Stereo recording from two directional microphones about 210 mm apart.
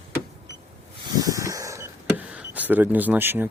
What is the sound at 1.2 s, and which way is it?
Power windows, 15° right (ahead or behind).